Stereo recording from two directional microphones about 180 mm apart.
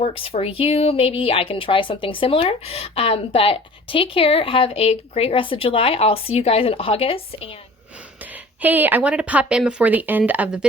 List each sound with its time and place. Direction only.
0.0 s speech: 30° left (ahead or behind)
8.6 s a woman's voice: 10° right (ahead or behind)